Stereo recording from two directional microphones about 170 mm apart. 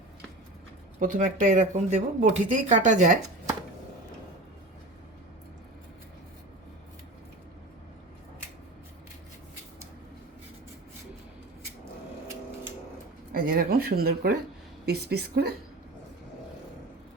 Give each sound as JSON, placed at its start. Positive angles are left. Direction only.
{"t": 0.9, "sound": "speech", "side_deg": -50}
{"t": 13.3, "sound": "a woman's voice", "side_deg": -60}